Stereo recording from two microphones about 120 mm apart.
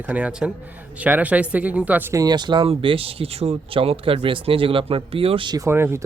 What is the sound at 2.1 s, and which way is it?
Speech, 30° right (ahead or behind).